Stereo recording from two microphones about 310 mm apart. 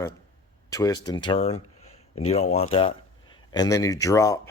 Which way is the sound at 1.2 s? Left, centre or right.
Centre.